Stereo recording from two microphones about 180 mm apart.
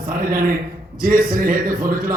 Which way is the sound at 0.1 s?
50° right (ahead or behind).